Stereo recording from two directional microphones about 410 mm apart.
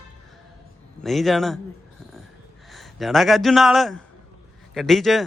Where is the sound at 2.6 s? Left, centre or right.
Centre.